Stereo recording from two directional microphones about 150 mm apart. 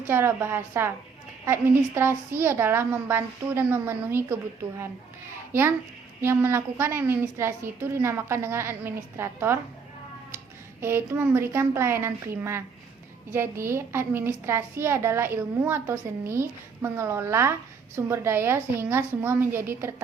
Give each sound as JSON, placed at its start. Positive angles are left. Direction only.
{"t": 0.0, "sound": "a woman's voice", "side_deg": -15}
{"t": 5.5, "sound": "a child's voice", "side_deg": -15}